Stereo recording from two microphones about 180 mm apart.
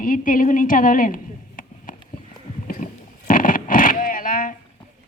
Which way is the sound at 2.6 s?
45° left (ahead or behind).